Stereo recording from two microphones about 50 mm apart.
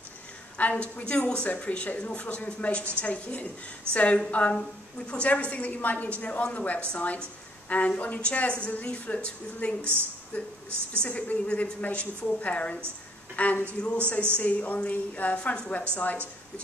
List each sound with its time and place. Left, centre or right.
0.6 s a woman's voice: left